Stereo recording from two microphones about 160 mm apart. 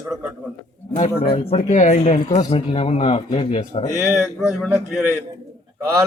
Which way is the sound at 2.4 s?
35° left (ahead or behind).